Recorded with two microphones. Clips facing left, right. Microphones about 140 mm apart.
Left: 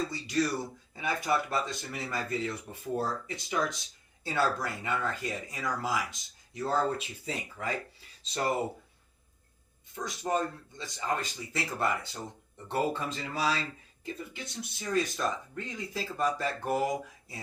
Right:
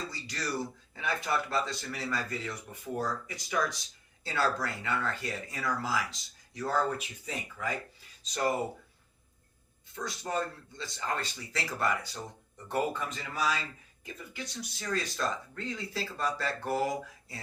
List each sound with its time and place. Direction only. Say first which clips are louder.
0.1 s speech: left 6 dB; 20° left (ahead or behind)
9.9 s speech: left 3 dB; 20° left (ahead or behind)